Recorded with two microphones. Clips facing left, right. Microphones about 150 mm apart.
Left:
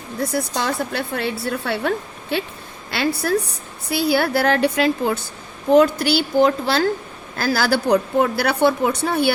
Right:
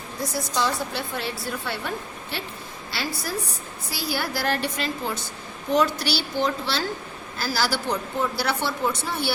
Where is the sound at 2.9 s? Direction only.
60° left (ahead or behind).